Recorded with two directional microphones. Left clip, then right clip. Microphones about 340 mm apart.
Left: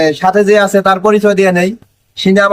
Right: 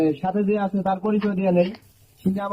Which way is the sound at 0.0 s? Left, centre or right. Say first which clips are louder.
Left 13 dB; left.